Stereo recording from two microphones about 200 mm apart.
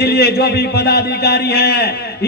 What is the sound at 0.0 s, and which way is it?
A man's voice, 55° left (ahead or behind).